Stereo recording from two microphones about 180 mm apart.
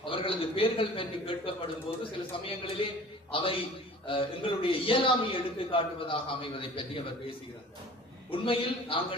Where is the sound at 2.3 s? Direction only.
30° left (ahead or behind).